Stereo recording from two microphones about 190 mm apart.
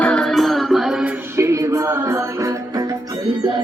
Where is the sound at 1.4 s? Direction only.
15° right (ahead or behind).